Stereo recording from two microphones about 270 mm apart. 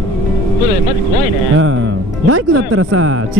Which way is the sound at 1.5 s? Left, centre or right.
Right.